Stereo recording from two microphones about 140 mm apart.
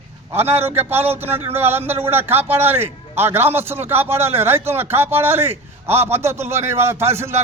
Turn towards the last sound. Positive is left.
turn(degrees=-20)  # may be behind; listen again after turning